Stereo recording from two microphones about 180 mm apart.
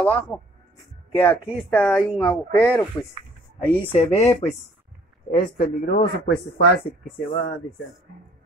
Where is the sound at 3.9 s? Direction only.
35° left (ahead or behind).